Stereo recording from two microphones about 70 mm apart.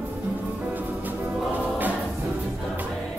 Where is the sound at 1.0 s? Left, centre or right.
Right.